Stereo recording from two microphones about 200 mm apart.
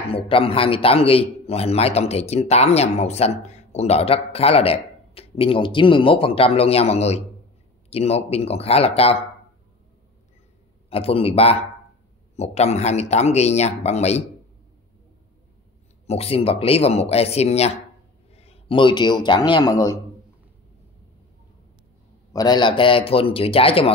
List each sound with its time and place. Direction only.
0.1 s a man's voice: 25° left (ahead or behind)
10.9 s a man's voice: 30° left (ahead or behind)
16.1 s a man's voice: 30° left (ahead or behind)
22.3 s a man's voice: 20° left (ahead or behind)